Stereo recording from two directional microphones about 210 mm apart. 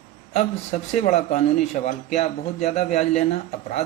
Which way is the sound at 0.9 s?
35° left (ahead or behind).